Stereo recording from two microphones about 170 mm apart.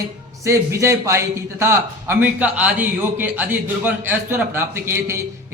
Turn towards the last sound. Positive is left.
turn(degrees=-15)  # may be behind; listen again after turning